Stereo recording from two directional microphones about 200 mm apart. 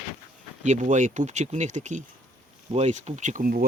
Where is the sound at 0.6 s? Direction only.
40° right (ahead or behind).